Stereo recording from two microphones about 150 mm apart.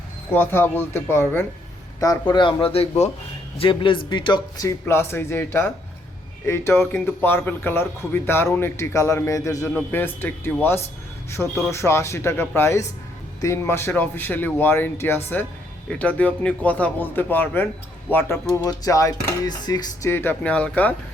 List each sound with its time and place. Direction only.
0.3 s speech: 15° left (ahead or behind)
2.0 s dishes: 25° left (ahead or behind)
2.7 s speech: 40° left (ahead or behind)
3.6 s dishes: 35° left (ahead or behind); by 5.7 s 15° left (ahead or behind)
6.4 s speech: 15° left (ahead or behind)
18.5 s dishes: 25° left (ahead or behind)